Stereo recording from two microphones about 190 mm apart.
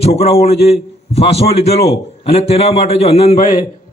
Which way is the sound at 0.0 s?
30° left (ahead or behind).